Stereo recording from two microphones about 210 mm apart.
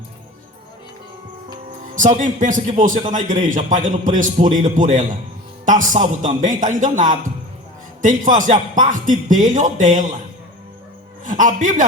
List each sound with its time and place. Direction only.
2.0 s a man's voice: 35° right (ahead or behind)
11.3 s a man's voice: 40° right (ahead or behind)